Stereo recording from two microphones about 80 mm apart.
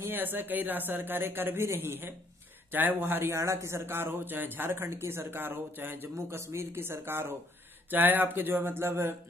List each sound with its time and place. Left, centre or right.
0.0 s a man's voice: right